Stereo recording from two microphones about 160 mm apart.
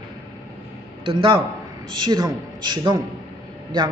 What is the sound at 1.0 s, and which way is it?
A man's voice, 30° right (ahead or behind).